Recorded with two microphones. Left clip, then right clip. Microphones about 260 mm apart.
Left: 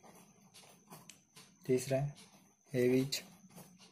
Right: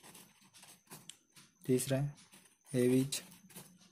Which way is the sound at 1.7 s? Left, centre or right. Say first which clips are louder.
Left 1 dB; right.